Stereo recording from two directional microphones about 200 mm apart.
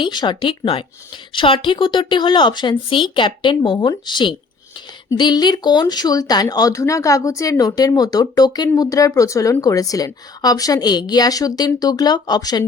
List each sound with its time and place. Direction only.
0.0 s speech: 25° left (ahead or behind)